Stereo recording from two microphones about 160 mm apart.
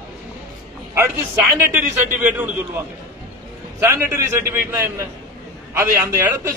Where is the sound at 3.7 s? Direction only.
15° right (ahead or behind).